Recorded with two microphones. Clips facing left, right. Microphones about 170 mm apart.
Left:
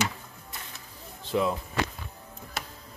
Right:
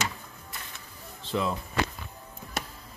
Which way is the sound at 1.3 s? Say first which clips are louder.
Left 3 dB; 10° left (ahead or behind).